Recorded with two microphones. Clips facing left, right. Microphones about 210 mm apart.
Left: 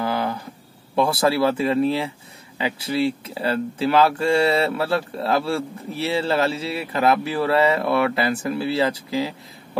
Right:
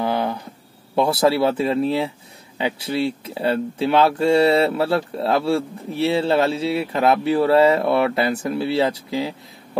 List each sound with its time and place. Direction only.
0.0 s a sound: centre (ahead or behind)
1.3 s speech: centre (ahead or behind)
4.8 s speech: 30° right (ahead or behind)
5.5 s speech: centre (ahead or behind)
7.3 s speech: 25° right (ahead or behind)
8.4 s speech: centre (ahead or behind)